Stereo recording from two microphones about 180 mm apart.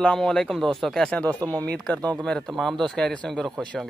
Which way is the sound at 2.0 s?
20° right (ahead or behind).